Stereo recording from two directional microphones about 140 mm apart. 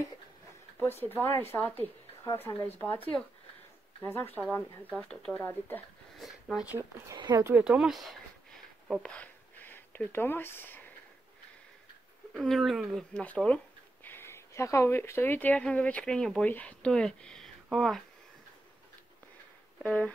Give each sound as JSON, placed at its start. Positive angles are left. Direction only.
{"t": 0.7, "sound": "speech", "side_deg": 15}
{"t": 4.0, "sound": "speech", "side_deg": 15}
{"t": 6.1, "sound": "speech", "side_deg": 0}
{"t": 7.1, "sound": "speech", "side_deg": -25}
{"t": 7.6, "sound": "speech", "side_deg": -5}
{"t": 9.1, "sound": "a sound", "side_deg": 10}
{"t": 12.4, "sound": "speech", "side_deg": 0}
{"t": 19.8, "sound": "speech", "side_deg": 10}